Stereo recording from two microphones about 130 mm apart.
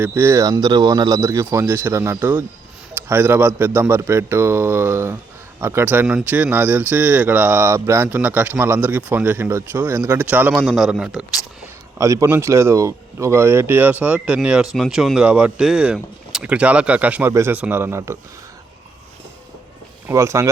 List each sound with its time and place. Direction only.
0.0 s a man's voice: 20° right (ahead or behind)
11.9 s speech: 25° right (ahead or behind)
20.1 s speech: 25° right (ahead or behind)